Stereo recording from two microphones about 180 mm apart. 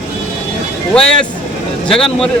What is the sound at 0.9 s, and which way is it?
Speech, 5° left (ahead or behind).